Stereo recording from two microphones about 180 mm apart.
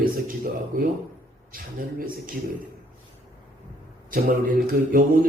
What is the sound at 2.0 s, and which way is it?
Speech, 50° right (ahead or behind).